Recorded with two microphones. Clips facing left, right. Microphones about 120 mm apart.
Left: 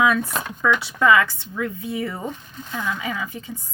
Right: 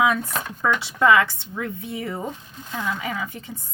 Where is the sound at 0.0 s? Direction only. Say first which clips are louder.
Left 1 dB; 25° right (ahead or behind).